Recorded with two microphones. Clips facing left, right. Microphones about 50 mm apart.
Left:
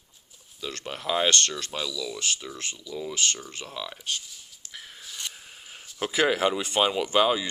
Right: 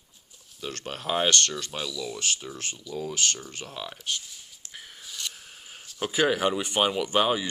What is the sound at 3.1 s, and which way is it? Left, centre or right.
Speech, left.